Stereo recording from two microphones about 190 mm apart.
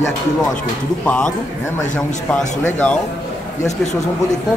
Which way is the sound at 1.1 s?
5° left (ahead or behind).